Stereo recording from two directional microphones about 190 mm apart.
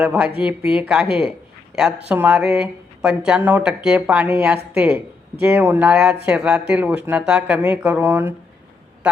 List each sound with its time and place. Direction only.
0.0 s speech: 5° right (ahead or behind)